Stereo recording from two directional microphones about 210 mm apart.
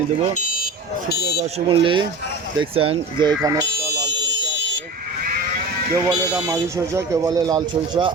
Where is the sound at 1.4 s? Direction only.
25° right (ahead or behind).